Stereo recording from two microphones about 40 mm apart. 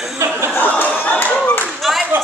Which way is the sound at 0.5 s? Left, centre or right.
Left.